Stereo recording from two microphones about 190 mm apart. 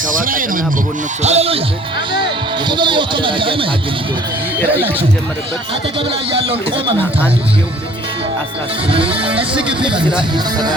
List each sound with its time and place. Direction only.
0.2 s speech: 45° right (ahead or behind)
1.2 s speech: 35° right (ahead or behind)
6.3 s speech: 30° right (ahead or behind)
8.9 s speech: 30° right (ahead or behind)
9.9 s speech: 5° right (ahead or behind)
10.3 s speech: 20° right (ahead or behind)